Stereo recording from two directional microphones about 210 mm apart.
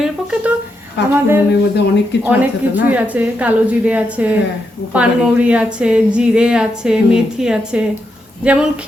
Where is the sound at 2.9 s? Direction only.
5° right (ahead or behind).